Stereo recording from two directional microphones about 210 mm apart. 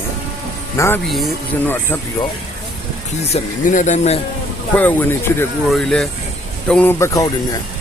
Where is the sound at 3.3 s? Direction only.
35° left (ahead or behind).